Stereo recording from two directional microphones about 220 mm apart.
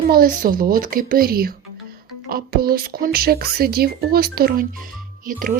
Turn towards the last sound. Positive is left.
turn(degrees=-40)  # may be behind; listen again after turning